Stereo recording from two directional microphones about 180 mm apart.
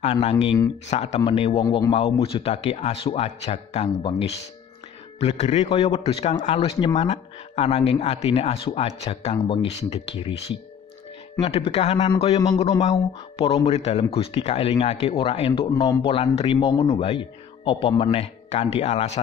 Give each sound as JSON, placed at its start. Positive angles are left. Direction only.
{"t": 0.0, "sound": "a man's voice", "side_deg": 35}